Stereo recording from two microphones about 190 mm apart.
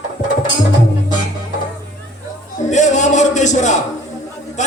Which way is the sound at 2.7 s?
40° left (ahead or behind).